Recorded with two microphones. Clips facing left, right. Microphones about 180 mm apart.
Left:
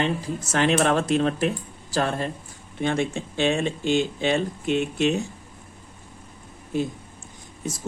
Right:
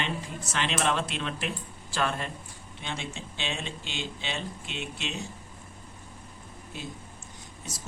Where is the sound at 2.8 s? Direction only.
50° left (ahead or behind).